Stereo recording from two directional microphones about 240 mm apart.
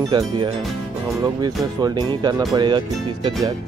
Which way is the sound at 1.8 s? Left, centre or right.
Centre.